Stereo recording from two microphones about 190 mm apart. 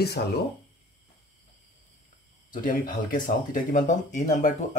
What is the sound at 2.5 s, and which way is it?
Speech, 45° left (ahead or behind).